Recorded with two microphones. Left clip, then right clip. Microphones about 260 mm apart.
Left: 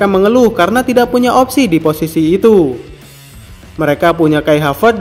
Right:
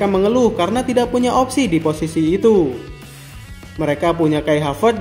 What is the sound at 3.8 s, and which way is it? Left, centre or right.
Speech, left.